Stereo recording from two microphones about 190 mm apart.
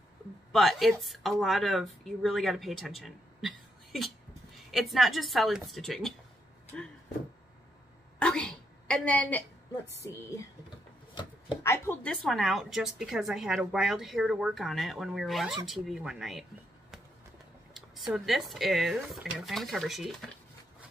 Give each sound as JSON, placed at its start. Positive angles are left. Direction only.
{"t": 0.5, "sound": "a woman's voice", "side_deg": 0}
{"t": 8.2, "sound": "a sound", "side_deg": 5}
{"t": 10.0, "sound": "speech", "side_deg": 15}
{"t": 11.6, "sound": "a woman's voice", "side_deg": 15}
{"t": 17.7, "sound": "a woman's voice", "side_deg": 0}